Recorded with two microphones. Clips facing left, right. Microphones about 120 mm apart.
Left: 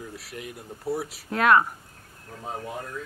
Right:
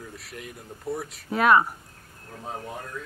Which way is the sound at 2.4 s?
5° left (ahead or behind).